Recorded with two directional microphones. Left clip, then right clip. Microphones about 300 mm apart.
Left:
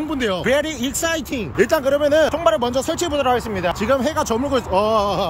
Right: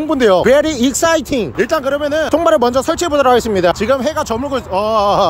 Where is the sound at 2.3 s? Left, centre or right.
Centre.